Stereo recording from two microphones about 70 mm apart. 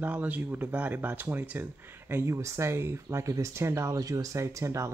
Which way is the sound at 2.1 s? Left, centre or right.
Right.